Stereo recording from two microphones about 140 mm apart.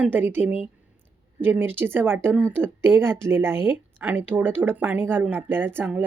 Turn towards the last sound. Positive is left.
turn(degrees=-15)  # may be behind; listen again after turning